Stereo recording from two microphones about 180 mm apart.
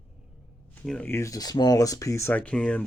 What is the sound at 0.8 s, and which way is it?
Speech, 5° left (ahead or behind).